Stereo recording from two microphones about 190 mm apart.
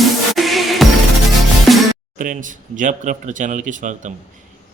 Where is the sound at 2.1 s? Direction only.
45° right (ahead or behind).